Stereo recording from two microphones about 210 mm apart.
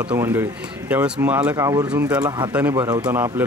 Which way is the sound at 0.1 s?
10° right (ahead or behind).